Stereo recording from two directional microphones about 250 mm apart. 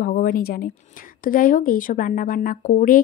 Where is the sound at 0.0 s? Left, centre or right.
Left.